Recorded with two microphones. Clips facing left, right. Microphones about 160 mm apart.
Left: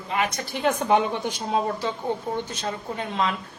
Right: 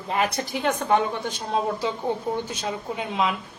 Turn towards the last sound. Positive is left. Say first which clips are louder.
# right 1 dB
turn(degrees=-10)  # may be behind; listen again after turning